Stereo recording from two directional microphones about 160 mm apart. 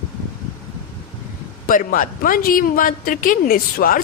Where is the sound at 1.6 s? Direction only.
60° left (ahead or behind).